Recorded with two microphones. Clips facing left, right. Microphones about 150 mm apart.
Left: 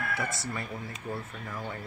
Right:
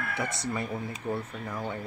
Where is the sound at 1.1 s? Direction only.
15° right (ahead or behind).